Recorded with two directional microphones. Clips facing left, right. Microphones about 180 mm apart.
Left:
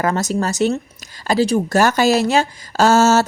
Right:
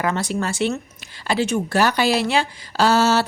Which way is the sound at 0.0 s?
40° left (ahead or behind).